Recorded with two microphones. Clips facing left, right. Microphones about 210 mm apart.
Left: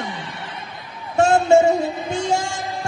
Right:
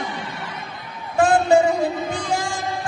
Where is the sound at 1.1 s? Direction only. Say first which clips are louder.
Left 1 dB; 25° left (ahead or behind).